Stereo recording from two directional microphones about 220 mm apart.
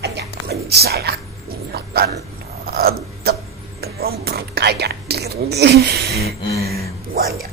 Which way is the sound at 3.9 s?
45° right (ahead or behind).